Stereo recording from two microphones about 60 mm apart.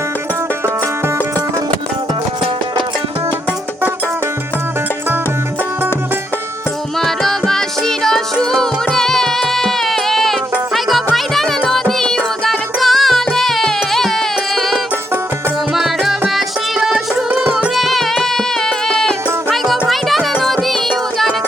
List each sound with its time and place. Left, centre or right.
7.0 s music: centre
17.2 s music: right
17.7 s music: centre